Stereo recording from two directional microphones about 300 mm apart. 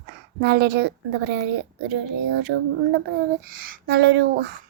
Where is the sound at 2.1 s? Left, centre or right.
Right.